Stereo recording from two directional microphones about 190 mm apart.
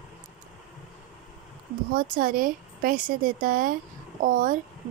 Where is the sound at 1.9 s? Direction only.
45° right (ahead or behind).